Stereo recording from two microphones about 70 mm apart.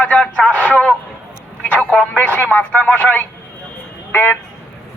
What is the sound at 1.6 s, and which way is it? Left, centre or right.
Speech, centre.